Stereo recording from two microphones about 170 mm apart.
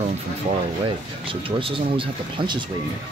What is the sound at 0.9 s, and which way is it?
Speech, 30° right (ahead or behind).